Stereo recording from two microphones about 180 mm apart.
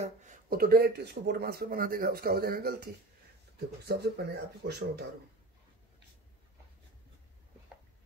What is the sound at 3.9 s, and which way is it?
Speech, 60° right (ahead or behind).